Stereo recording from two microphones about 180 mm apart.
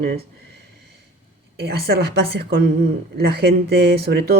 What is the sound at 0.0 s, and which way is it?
Speech, 60° right (ahead or behind).